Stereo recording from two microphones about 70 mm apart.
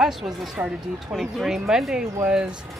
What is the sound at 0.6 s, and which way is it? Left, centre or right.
Speech, right.